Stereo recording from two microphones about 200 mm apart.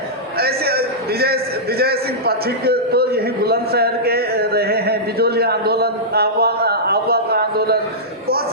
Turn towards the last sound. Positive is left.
turn(degrees=-50)  # may be behind; listen again after turning